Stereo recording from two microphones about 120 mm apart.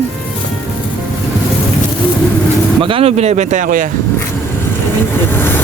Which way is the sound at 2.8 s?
55° right (ahead or behind).